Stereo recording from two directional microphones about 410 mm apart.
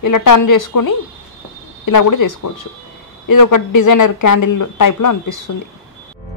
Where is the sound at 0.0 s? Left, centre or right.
Left.